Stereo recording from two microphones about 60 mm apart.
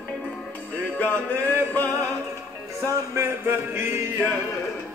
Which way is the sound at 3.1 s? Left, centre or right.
Right.